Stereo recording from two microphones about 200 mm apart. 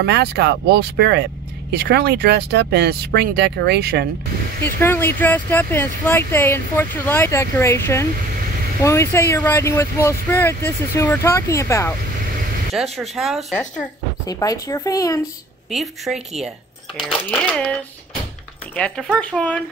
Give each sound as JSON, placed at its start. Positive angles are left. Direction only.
{"t": 0.0, "sound": "speech", "side_deg": -55}
{"t": 4.6, "sound": "speech", "side_deg": 10}
{"t": 12.9, "sound": "speech", "side_deg": 0}
{"t": 14.2, "sound": "speech", "side_deg": 20}
{"t": 15.7, "sound": "speech", "side_deg": 0}
{"t": 18.8, "sound": "speech", "side_deg": 5}